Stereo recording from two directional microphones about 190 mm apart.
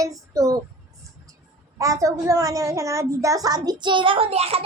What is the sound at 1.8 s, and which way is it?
A woman's voice, 15° right (ahead or behind).